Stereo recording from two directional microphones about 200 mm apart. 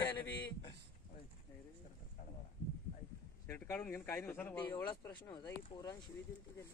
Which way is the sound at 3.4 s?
10° left (ahead or behind).